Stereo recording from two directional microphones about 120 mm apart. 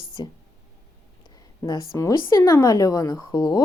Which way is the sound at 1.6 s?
25° left (ahead or behind).